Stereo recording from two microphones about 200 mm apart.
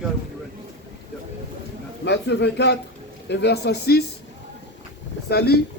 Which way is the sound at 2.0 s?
60° left (ahead or behind).